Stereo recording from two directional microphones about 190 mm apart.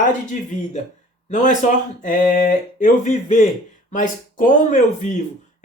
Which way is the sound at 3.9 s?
45° left (ahead or behind).